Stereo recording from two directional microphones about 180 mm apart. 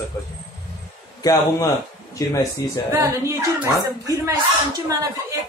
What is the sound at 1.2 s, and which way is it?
A man's voice, 20° left (ahead or behind).